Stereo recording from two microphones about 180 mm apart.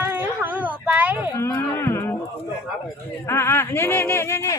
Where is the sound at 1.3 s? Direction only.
15° left (ahead or behind).